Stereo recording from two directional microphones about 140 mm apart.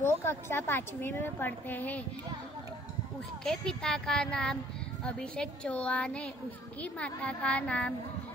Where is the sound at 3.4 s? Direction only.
5° left (ahead or behind).